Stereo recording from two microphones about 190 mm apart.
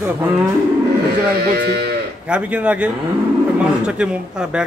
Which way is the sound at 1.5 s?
55° right (ahead or behind).